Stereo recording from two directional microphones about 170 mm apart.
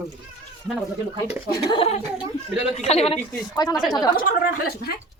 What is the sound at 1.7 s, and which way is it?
Speech, 35° left (ahead or behind).